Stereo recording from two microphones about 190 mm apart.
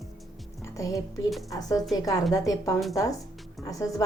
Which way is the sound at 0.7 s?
15° left (ahead or behind).